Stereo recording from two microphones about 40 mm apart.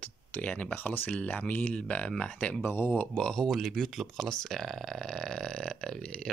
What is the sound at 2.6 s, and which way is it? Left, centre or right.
Speech, left.